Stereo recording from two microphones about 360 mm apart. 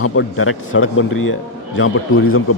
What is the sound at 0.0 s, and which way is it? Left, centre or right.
A man's voice, left.